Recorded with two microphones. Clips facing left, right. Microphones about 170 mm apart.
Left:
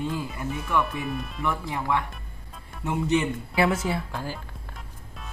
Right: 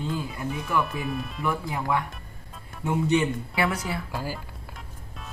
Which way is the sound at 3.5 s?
25° left (ahead or behind).